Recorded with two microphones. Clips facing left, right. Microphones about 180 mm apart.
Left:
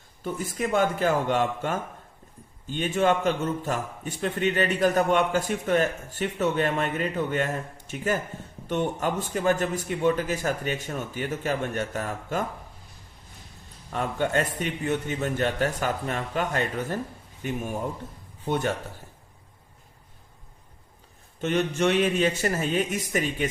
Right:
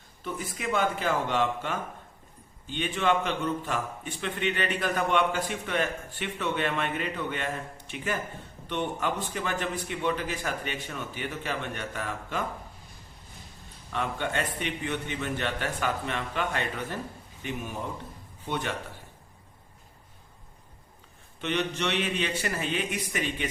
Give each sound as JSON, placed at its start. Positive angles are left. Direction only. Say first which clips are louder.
{"t": 0.2, "sound": "a man's voice", "louder": "left 6 dB", "side_deg": 45}
{"t": 13.9, "sound": "a man's voice", "louder": "left 5 dB", "side_deg": 45}
{"t": 21.4, "sound": "a man's voice", "louder": "left 6 dB", "side_deg": 45}